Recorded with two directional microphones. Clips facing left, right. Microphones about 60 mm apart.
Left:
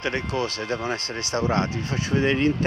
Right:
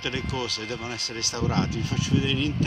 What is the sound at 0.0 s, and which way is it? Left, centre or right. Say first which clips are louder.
Speech: left 4 dB; left.